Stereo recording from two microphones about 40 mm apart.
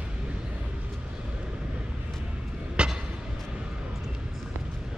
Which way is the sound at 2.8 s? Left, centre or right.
Right.